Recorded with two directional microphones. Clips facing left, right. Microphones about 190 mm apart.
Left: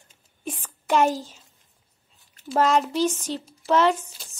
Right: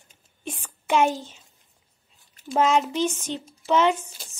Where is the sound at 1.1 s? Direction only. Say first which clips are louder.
Left 2 dB; 40° left (ahead or behind).